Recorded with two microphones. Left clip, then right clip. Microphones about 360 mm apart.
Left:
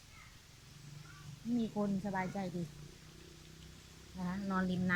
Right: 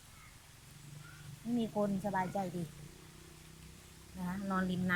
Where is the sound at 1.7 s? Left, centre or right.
Centre.